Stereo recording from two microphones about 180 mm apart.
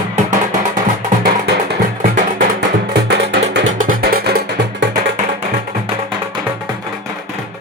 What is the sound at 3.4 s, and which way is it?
Music, 50° right (ahead or behind).